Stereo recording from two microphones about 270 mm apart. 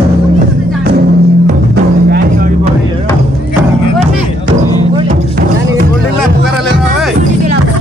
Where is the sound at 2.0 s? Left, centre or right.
Right.